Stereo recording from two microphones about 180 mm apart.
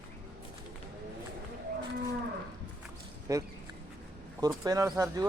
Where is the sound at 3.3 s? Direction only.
20° right (ahead or behind).